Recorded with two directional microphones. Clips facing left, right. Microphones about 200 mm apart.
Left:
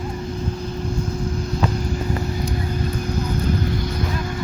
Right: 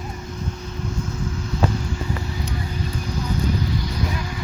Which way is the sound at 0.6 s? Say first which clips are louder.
Left 4 dB; 35° left (ahead or behind).